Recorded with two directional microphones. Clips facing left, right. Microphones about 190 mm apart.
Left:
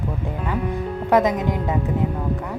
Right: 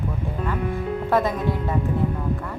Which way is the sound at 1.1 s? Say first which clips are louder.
Left 4 dB; 15° left (ahead or behind).